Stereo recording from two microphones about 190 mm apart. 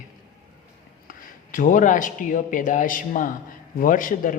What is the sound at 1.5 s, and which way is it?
A man's voice, 45° left (ahead or behind).